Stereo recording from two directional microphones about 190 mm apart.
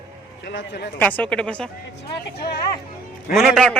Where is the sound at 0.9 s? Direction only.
10° left (ahead or behind).